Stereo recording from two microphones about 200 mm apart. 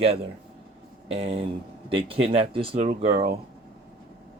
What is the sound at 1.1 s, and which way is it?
Speech, 30° right (ahead or behind).